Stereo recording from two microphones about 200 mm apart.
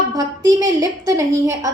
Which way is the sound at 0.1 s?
15° right (ahead or behind).